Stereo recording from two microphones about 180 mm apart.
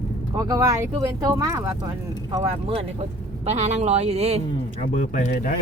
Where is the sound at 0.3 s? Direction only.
20° right (ahead or behind).